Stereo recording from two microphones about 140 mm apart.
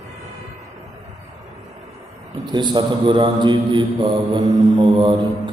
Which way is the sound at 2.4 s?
35° right (ahead or behind).